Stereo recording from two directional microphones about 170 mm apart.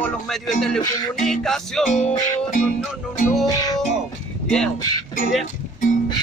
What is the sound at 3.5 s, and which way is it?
Music, 20° left (ahead or behind).